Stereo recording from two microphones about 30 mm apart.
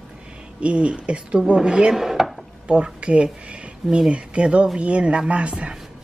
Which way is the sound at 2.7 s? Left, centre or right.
Right.